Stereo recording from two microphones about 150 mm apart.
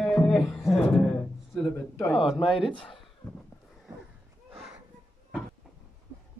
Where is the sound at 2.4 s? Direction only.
35° left (ahead or behind).